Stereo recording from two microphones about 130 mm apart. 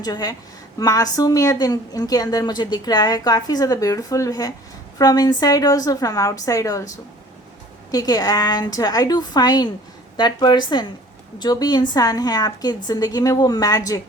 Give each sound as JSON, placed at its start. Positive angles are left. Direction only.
{"t": 0.0, "sound": "a woman's voice", "side_deg": 30}